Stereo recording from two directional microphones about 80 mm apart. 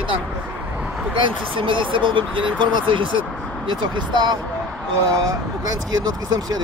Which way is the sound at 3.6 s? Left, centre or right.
Right.